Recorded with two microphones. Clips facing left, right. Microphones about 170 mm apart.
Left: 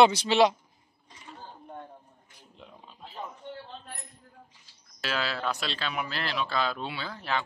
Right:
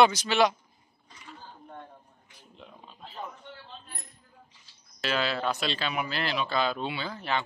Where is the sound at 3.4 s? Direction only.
45° left (ahead or behind).